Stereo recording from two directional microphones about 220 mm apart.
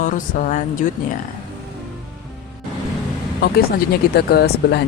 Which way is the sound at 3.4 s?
45° left (ahead or behind).